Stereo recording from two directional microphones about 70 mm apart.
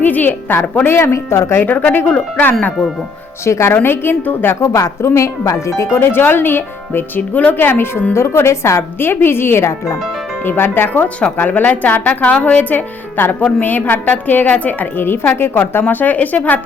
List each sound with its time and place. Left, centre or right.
0.0 s speech: left
3.4 s speech: left
4.7 s speech: left
7.2 s speech: centre
7.5 s speech: left